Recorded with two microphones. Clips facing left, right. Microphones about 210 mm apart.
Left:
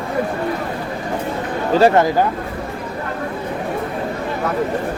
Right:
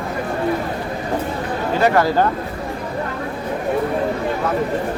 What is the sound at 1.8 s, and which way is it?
Speech, 25° left (ahead or behind).